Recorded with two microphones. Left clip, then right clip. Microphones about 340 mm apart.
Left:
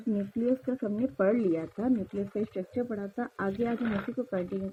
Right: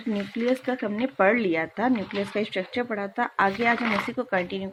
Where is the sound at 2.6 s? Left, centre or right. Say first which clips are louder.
Right 6 dB; centre.